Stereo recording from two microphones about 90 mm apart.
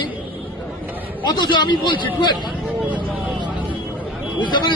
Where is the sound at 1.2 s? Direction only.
55° left (ahead or behind).